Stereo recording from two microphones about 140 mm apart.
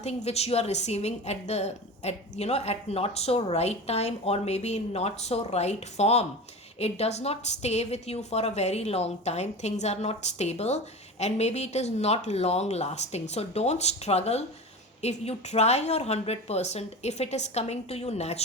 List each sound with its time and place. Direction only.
0.0 s a woman's voice: 50° left (ahead or behind)